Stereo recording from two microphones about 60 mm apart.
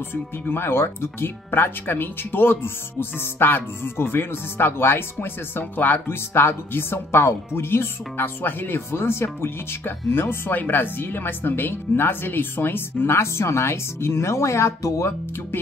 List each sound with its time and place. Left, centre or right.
0.1 s speech: left